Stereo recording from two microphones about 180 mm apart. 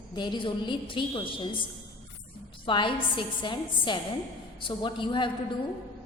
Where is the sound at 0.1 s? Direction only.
25° left (ahead or behind).